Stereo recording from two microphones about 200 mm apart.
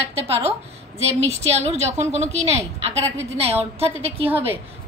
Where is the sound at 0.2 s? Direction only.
30° right (ahead or behind).